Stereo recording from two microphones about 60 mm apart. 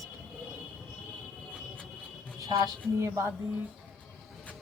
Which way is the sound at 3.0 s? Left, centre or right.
Right.